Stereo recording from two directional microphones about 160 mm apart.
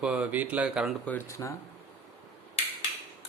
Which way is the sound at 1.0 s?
10° left (ahead or behind).